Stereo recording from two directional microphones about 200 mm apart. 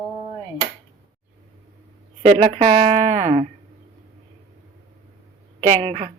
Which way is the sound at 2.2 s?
30° right (ahead or behind).